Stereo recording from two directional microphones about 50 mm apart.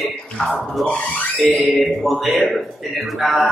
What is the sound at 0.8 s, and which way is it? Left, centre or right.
Speech, left.